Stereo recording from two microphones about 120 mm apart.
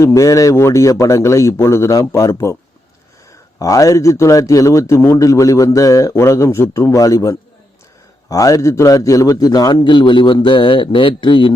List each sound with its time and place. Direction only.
0.0 s a man's voice: 25° left (ahead or behind)
3.6 s a man's voice: 30° left (ahead or behind)